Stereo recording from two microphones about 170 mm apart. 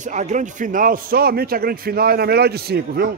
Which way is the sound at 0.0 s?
45° right (ahead or behind).